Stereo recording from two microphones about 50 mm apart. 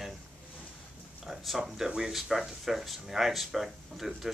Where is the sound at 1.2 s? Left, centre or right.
Centre.